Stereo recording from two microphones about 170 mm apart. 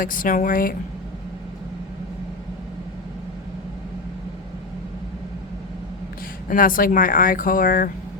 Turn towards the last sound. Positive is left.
turn(degrees=55)  # may be behind; listen again after turning